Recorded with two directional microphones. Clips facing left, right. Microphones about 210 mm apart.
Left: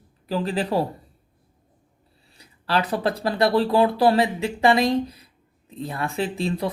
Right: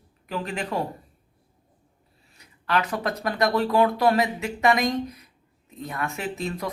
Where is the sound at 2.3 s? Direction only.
30° left (ahead or behind).